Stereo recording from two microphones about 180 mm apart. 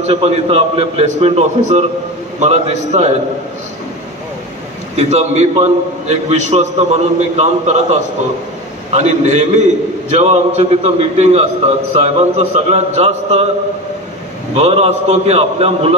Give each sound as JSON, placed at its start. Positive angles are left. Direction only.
{"t": 0.0, "sound": "a man's voice", "side_deg": -35}
{"t": 4.9, "sound": "a man's voice", "side_deg": -40}
{"t": 14.5, "sound": "a man's voice", "side_deg": -35}